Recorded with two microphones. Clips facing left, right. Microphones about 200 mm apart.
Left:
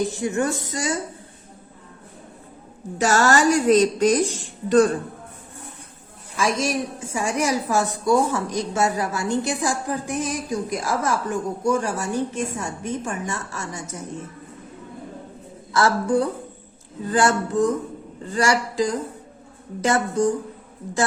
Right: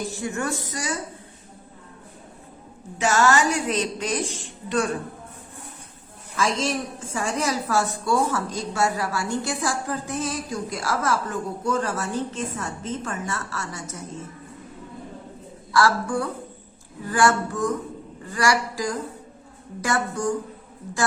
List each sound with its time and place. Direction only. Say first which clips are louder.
0.1 s speech: left 5 dB; 20° left (ahead or behind)
3.0 s music: left 2 dB; 40° left (ahead or behind)
6.3 s a woman's voice: left 2 dB; 10° left (ahead or behind)
15.7 s speech: left 2 dB; 20° left (ahead or behind)